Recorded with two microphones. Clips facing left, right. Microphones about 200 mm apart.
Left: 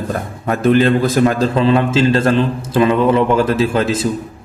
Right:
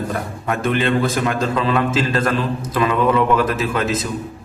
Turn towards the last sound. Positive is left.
turn(degrees=30)  # may be behind; listen again after turning